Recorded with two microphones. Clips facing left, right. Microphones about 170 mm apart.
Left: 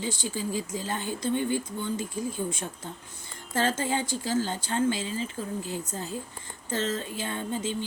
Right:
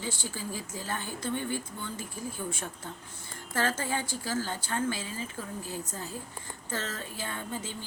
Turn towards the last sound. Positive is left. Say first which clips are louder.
# left 6 dB
turn(degrees=20)  # may be behind; listen again after turning